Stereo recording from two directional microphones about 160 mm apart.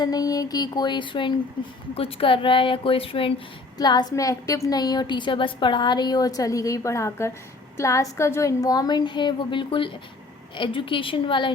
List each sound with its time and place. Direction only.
0.0 s a woman's voice: 25° left (ahead or behind)